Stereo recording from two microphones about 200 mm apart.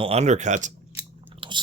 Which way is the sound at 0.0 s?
30° right (ahead or behind).